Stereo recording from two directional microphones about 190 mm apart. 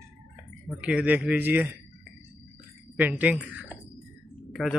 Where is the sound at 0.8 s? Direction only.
5° right (ahead or behind).